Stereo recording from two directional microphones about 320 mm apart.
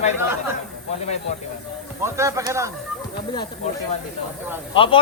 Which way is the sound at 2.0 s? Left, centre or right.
Centre.